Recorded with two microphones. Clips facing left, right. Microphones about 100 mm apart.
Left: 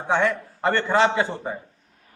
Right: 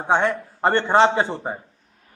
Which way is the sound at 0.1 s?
30° right (ahead or behind).